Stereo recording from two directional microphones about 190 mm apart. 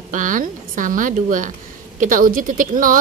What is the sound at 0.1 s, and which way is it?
A woman's voice, 45° right (ahead or behind).